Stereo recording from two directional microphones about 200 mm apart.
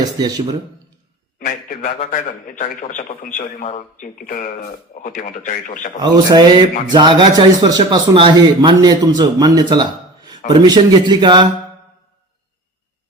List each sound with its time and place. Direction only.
0.2 s a man's voice: 20° right (ahead or behind)
1.5 s a man's voice: 45° left (ahead or behind)
6.0 s a man's voice: 20° right (ahead or behind)